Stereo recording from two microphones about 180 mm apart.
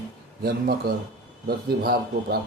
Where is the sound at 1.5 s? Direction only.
60° right (ahead or behind).